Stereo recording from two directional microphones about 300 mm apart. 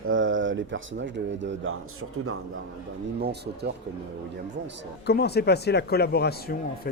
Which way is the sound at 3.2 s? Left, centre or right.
Right.